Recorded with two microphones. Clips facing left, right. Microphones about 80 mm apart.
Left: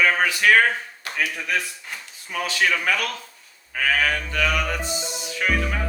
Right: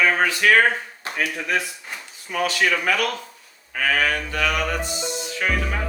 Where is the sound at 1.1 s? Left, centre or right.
Centre.